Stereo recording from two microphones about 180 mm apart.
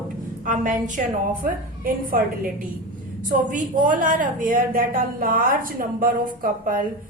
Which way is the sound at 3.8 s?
45° right (ahead or behind).